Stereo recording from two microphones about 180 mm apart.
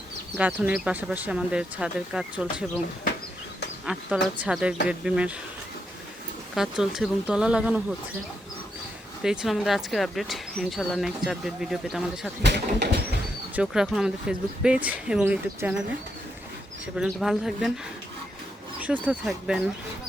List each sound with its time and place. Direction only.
0.3 s speech: 5° right (ahead or behind)
3.8 s speech: 5° right (ahead or behind)
6.6 s speech: centre (ahead or behind)
9.2 s speech: 5° right (ahead or behind)
12.4 s speech: 70° right (ahead or behind)
13.6 s speech: centre (ahead or behind)
17.0 s speech: centre (ahead or behind)
19.0 s speech: 5° right (ahead or behind)